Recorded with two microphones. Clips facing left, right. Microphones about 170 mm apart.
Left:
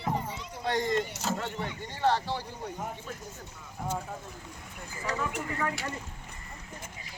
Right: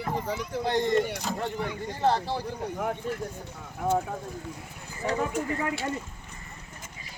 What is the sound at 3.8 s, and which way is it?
Speech, 70° right (ahead or behind).